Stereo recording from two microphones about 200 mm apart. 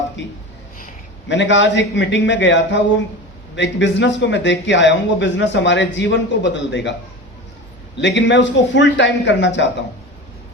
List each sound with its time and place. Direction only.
1.3 s speech: 65° left (ahead or behind)
8.0 s speech: 60° left (ahead or behind)